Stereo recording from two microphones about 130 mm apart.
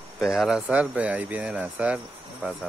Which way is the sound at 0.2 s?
5° right (ahead or behind).